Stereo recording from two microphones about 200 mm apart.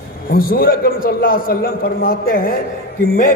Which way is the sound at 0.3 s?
45° left (ahead or behind).